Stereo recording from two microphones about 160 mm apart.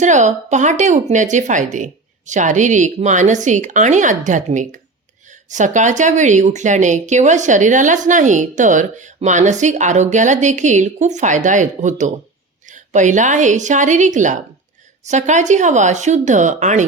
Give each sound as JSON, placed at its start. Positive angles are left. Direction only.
{"t": 0.0, "sound": "a woman's voice", "side_deg": -50}